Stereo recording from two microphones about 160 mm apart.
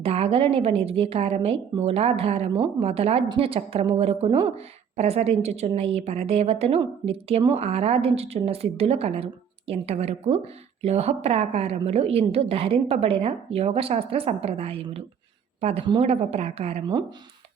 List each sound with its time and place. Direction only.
0.0 s a woman's voice: 40° right (ahead or behind)